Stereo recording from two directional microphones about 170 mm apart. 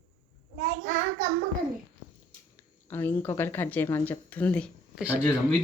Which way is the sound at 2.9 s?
10° left (ahead or behind).